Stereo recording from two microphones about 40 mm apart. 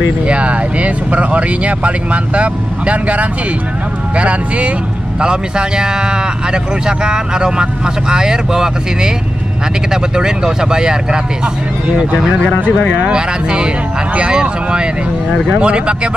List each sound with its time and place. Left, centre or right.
0.3 s speech: right
5.2 s speech: right
10.1 s speech: centre
13.1 s speech: right